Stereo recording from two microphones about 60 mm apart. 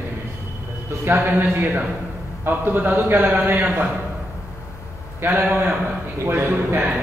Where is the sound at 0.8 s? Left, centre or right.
Right.